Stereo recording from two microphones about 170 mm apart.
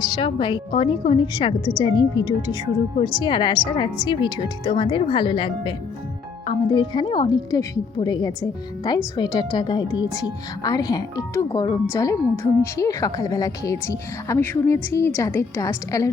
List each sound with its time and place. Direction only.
0.2 s speech: 30° left (ahead or behind)